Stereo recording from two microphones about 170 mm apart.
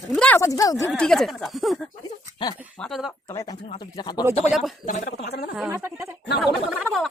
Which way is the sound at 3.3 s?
20° left (ahead or behind).